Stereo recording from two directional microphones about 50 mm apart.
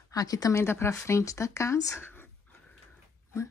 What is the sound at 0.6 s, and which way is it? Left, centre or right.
Speech, left.